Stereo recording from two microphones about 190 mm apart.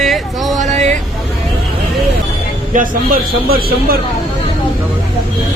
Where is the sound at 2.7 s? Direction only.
45° right (ahead or behind).